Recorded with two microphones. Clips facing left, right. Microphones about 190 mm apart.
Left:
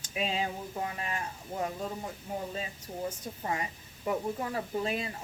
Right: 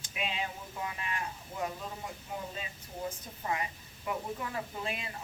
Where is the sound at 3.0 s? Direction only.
35° left (ahead or behind).